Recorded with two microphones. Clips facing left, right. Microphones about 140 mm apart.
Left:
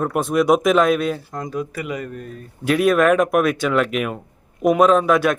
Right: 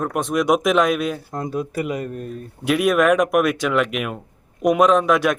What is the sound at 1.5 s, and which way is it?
Speech, 35° right (ahead or behind).